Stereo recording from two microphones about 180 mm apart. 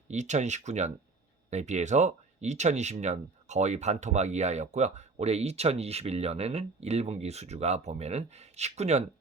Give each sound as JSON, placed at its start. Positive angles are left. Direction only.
{"t": 0.1, "sound": "speech", "side_deg": -40}